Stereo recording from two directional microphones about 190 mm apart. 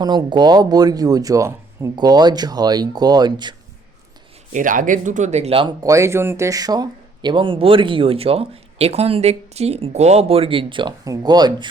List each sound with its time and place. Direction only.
0.0 s speech: 20° right (ahead or behind)
4.5 s speech: 45° right (ahead or behind)
5.8 s speech: 15° right (ahead or behind)